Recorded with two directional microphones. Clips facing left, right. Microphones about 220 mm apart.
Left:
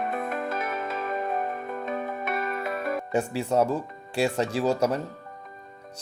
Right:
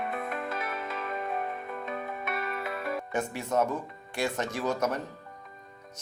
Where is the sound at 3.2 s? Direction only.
30° left (ahead or behind).